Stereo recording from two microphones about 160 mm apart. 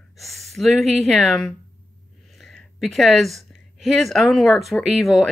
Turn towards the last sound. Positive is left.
turn(degrees=0)  # may be behind; listen again after turning